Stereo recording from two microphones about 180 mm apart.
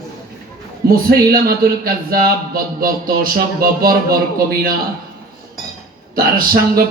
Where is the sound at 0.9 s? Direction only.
55° right (ahead or behind).